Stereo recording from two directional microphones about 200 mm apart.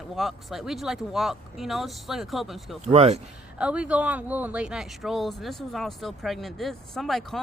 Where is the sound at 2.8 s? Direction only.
30° right (ahead or behind).